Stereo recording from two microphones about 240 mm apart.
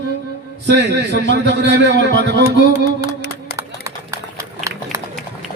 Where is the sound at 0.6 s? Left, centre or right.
Right.